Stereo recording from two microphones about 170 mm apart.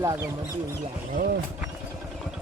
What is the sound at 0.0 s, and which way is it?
Speech, 20° right (ahead or behind).